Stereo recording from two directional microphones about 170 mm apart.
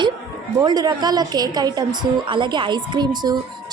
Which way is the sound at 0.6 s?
25° right (ahead or behind).